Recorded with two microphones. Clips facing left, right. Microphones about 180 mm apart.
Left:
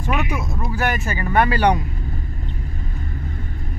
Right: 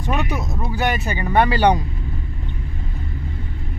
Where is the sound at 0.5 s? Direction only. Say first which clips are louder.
Right 1 dB; 20° right (ahead or behind).